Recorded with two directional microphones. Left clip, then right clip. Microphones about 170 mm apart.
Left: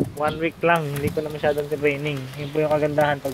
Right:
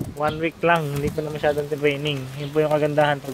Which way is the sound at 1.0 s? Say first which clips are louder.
Even; 40° right (ahead or behind).